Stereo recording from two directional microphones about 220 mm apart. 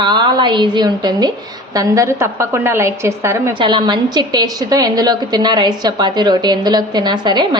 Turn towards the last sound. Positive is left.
turn(degrees=-20)  # may be behind; listen again after turning